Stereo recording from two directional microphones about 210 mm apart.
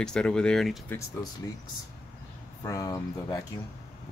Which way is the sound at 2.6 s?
15° left (ahead or behind).